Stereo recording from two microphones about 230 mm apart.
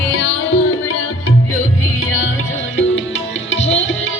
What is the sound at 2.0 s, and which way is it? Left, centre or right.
Music, left.